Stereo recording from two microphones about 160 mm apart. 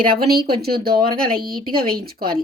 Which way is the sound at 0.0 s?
70° right (ahead or behind).